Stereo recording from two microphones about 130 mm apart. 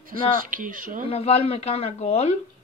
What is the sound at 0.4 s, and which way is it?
Speech, 90° right.